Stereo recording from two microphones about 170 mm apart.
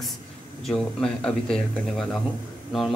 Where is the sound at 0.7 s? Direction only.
Centre (ahead or behind).